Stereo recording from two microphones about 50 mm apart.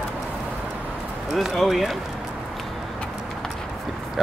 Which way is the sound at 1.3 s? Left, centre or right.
Centre.